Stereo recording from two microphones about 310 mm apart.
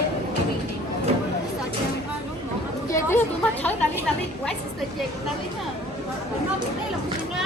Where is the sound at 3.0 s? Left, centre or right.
Centre.